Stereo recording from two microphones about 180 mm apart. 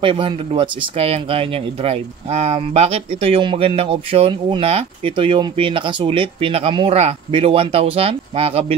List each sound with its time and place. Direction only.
0.0 s speech: 30° right (ahead or behind)